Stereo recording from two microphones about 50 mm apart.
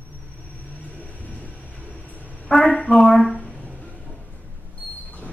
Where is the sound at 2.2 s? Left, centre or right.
Left.